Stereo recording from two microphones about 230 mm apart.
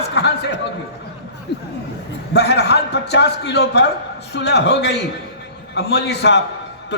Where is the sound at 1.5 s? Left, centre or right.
Left.